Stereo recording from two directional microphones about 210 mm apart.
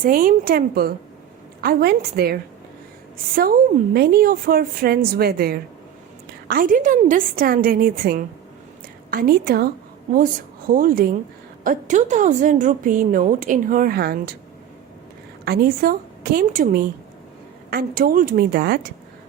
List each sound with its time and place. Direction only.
0.0 s a woman's voice: 40° right (ahead or behind)
3.9 s a woman's voice: 45° right (ahead or behind)
15.4 s a woman's voice: 45° right (ahead or behind)